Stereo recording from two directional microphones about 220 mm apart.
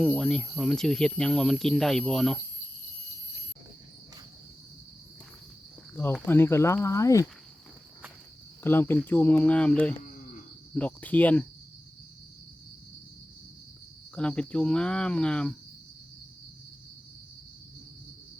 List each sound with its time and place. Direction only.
0.0 s speech: 5° left (ahead or behind)
5.9 s speech: 10° left (ahead or behind)
8.6 s speech: 10° left (ahead or behind)
14.2 s speech: 5° left (ahead or behind)